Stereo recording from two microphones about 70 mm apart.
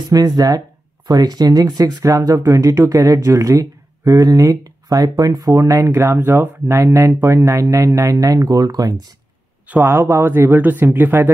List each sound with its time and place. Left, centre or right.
0.1 s speech: right
9.7 s speech: right